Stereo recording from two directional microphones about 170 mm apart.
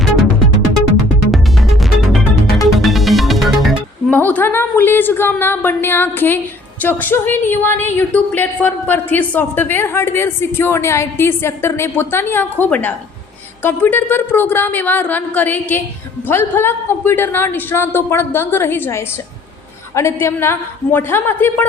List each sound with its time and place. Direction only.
1.3 s music: centre (ahead or behind)
4.1 s a woman's voice: 10° left (ahead or behind)